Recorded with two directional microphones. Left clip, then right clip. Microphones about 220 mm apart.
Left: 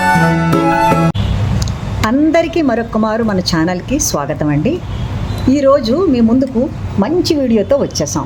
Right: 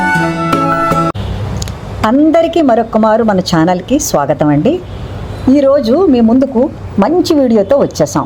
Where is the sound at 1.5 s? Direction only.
10° right (ahead or behind).